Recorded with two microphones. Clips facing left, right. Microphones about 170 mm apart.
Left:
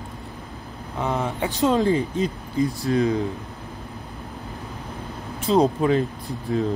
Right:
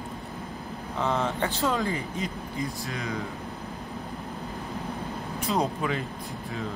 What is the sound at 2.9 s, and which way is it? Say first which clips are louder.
Speech: left 13 dB; 35° left (ahead or behind).